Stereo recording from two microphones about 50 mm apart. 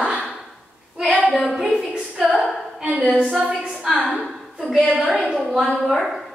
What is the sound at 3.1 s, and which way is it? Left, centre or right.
Speech, centre.